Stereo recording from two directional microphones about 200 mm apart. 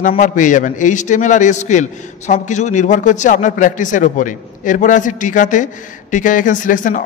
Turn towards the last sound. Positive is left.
turn(degrees=40)  # may be behind; listen again after turning